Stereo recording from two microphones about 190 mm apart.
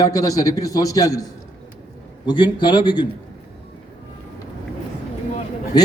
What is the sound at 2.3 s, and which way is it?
Speech, 25° left (ahead or behind).